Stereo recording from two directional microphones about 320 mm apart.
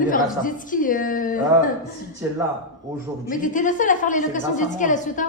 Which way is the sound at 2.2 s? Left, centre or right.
Centre.